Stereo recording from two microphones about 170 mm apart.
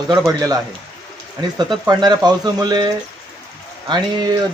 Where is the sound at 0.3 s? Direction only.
20° right (ahead or behind).